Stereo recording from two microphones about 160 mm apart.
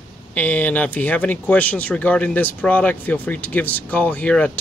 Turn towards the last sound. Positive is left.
turn(degrees=5)  # may be behind; listen again after turning